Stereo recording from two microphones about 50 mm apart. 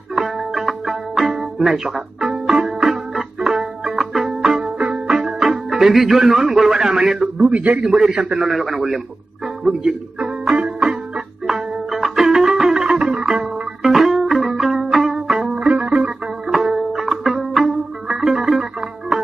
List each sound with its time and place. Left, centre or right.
0.1 s music: centre
5.1 s speech: centre
7.5 s a man's voice: right
7.8 s a man's voice: centre
10.1 s music: centre
11.1 s music: centre
13.4 s music: centre
15.5 s music: right
16.4 s music: centre